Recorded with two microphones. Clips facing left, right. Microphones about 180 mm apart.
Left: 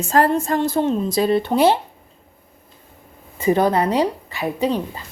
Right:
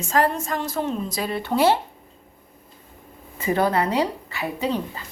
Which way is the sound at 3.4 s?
20° left (ahead or behind).